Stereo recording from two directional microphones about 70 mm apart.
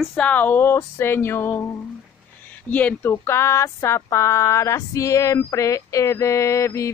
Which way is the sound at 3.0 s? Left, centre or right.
Left.